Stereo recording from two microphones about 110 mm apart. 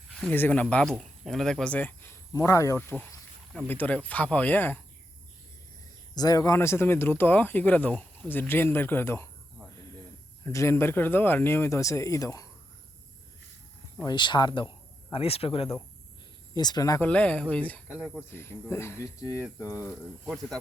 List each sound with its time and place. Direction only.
0.1 s a sound: 10° left (ahead or behind)
0.3 s speech: 15° left (ahead or behind)
3.7 s speech: 15° left (ahead or behind)
6.1 s speech: 35° left (ahead or behind)
10.4 s speech: 25° left (ahead or behind)
14.0 s speech: 40° left (ahead or behind)
15.1 s speech: 60° left (ahead or behind)
16.6 s speech: 40° left (ahead or behind)
17.0 s speech: 10° left (ahead or behind)
19.8 s speech: 15° right (ahead or behind)
20.2 s speech: 5° left (ahead or behind)